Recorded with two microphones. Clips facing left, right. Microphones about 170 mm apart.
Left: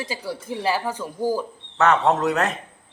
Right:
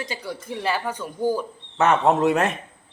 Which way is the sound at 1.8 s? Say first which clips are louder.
Even; 15° right (ahead or behind).